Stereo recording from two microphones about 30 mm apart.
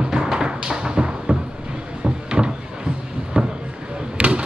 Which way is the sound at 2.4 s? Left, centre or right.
Right.